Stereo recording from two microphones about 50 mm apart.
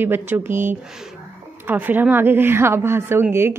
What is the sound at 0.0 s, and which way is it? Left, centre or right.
Speech, right.